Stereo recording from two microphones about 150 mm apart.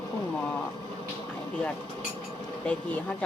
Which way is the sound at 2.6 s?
10° left (ahead or behind).